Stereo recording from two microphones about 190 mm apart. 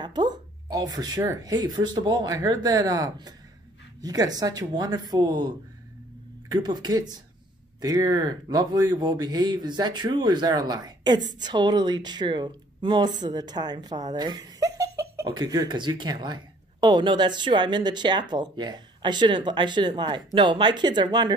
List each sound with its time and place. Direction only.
0.0 s speech: 20° right (ahead or behind)
6.5 s speech: 20° right (ahead or behind)